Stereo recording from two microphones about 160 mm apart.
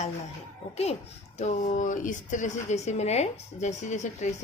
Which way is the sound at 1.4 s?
45° left (ahead or behind).